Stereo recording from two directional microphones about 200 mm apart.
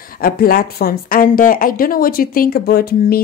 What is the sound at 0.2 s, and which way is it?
A woman's voice, 50° left (ahead or behind).